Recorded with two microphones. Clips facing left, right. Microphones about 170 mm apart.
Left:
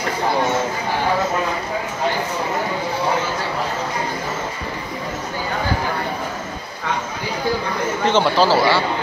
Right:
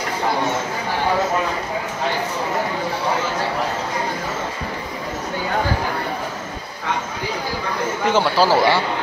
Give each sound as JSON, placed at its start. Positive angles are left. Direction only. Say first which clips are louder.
{"t": 8.0, "sound": "speech", "louder": "left 1 dB", "side_deg": -5}
{"t": 8.5, "sound": "speech", "louder": "even", "side_deg": -20}